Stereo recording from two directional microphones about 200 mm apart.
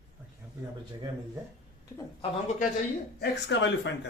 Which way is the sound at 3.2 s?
60° left (ahead or behind).